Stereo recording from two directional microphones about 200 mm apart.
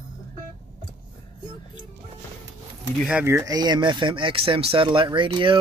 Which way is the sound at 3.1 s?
10° right (ahead or behind).